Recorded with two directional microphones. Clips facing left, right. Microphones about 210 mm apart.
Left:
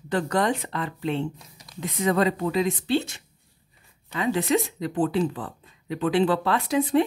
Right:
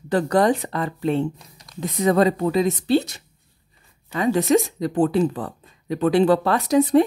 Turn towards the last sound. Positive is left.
turn(degrees=-40)  # may be behind; listen again after turning